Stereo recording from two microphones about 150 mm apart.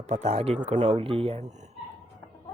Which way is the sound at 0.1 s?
45° right (ahead or behind).